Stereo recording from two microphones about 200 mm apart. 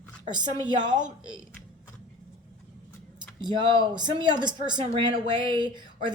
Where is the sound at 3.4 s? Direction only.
20° right (ahead or behind).